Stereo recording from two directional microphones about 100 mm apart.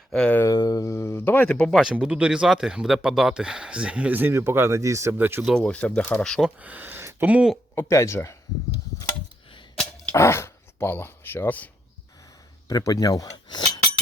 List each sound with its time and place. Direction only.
0.1 s a sound: 10° left (ahead or behind)
0.4 s a sound: 40° left (ahead or behind); by 1.5 s 20° left (ahead or behind)
1.5 s speech: 5° left (ahead or behind)
1.8 s speech: 10° right (ahead or behind); by 5.1 s 30° right (ahead or behind)
5.1 s speech: 20° right (ahead or behind)
5.6 s speech: 15° left (ahead or behind)
6.6 s speech: 15° right (ahead or behind)
7.8 s speech: 30° left (ahead or behind)
10.2 s speech: 25° left (ahead or behind)
12.6 s cutlery: 35° left (ahead or behind)